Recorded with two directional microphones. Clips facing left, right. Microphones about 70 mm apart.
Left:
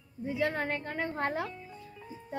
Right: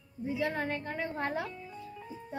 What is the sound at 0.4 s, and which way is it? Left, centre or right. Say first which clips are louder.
Speech: left 2 dB; left.